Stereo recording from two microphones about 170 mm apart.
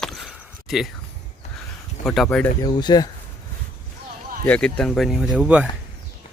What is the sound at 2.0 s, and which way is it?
Speech, centre (ahead or behind).